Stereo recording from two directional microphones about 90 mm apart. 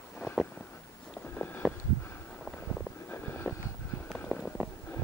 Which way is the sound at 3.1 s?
20° left (ahead or behind).